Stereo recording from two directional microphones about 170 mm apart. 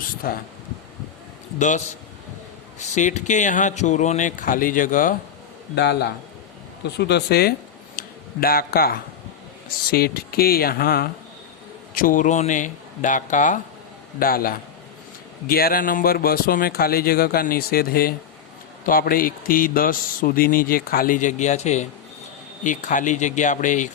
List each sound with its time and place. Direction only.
0.2 s speech: 60° left (ahead or behind)
1.5 s speech: 45° left (ahead or behind)
5.7 s a man's voice: 80° left
7.9 s a sound: 60° left (ahead or behind)
9.6 s speech: 60° left (ahead or behind)
14.2 s speech: 60° left (ahead or behind)